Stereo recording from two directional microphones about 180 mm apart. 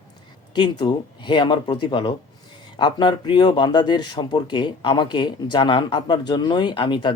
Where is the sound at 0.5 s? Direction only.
25° left (ahead or behind).